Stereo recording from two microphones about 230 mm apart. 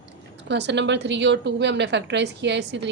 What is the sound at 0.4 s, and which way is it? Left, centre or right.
A woman's voice, right.